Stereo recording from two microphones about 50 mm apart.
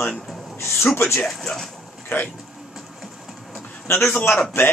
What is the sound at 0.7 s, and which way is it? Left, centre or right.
Speech, left.